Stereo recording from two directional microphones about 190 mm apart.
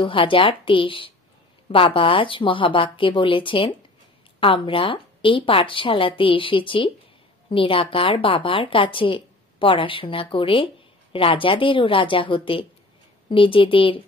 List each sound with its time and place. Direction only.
0.0 s a woman's voice: 25° left (ahead or behind)